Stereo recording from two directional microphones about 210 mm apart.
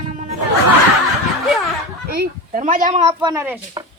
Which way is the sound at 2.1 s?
45° right (ahead or behind).